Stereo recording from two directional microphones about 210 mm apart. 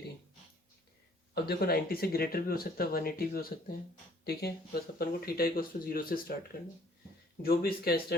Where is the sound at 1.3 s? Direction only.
50° left (ahead or behind).